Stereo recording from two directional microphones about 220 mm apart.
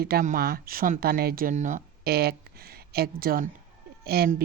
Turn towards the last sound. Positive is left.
turn(degrees=-45)  # may be behind; listen again after turning